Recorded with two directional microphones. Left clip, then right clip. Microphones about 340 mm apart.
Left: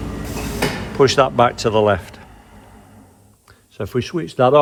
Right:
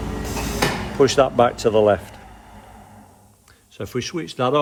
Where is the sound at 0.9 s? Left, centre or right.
Centre.